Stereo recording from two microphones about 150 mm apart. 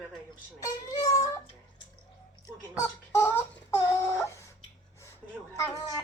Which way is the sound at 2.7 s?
20° left (ahead or behind).